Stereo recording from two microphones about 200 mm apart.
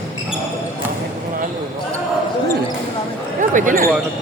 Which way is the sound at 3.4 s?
40° right (ahead or behind).